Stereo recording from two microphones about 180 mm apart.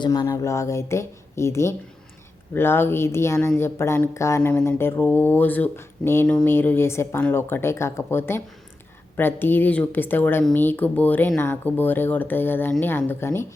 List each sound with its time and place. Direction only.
0.0 s speech: 20° left (ahead or behind)